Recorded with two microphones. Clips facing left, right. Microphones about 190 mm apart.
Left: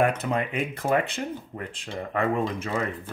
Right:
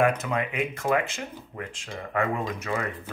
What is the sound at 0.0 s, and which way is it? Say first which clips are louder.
Speech: even; 30° left (ahead or behind).